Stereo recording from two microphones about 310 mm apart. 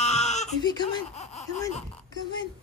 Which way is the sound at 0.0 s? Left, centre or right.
Left.